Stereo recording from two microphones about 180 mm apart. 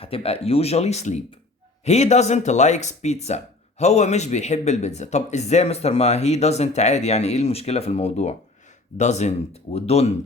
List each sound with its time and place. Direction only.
0.0 s speech: 35° left (ahead or behind)